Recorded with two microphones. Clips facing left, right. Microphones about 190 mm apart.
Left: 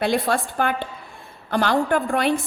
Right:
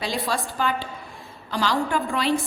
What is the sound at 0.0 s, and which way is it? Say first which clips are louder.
A woman's voice: left 6 dB; 55° left (ahead or behind).